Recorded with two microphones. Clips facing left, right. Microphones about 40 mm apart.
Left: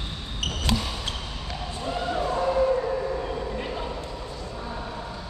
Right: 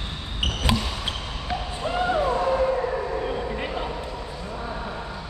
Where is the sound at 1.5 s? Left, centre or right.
Right.